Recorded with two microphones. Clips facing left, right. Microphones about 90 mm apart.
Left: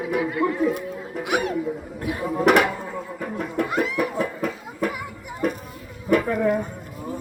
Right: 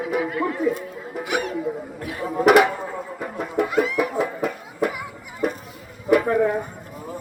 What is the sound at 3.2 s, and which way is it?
Music, 5° right (ahead or behind).